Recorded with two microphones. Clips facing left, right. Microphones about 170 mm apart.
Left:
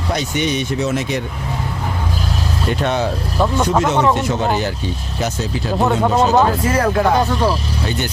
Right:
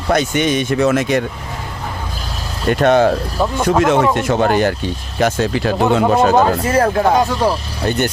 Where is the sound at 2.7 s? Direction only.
50° right (ahead or behind).